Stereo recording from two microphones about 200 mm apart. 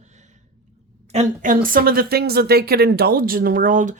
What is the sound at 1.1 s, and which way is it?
Speech, 40° right (ahead or behind).